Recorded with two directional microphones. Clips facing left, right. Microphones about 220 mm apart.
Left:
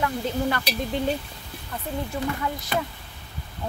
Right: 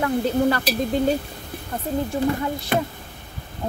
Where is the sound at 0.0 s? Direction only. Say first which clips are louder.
Right 6 dB; 35° right (ahead or behind).